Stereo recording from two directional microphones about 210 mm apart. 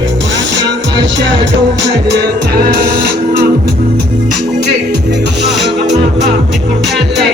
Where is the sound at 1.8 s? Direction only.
55° right (ahead or behind).